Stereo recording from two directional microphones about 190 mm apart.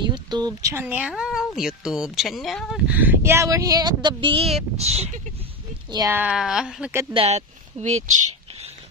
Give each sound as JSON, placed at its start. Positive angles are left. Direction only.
{"t": 0.1, "sound": "speech", "side_deg": -20}
{"t": 2.9, "sound": "speech", "side_deg": -10}
{"t": 5.9, "sound": "speech", "side_deg": -15}
{"t": 7.2, "sound": "speech", "side_deg": -35}